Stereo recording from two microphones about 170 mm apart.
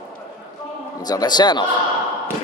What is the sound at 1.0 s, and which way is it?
Speech, 25° left (ahead or behind).